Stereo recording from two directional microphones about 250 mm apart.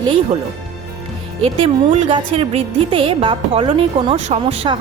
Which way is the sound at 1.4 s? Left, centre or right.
Right.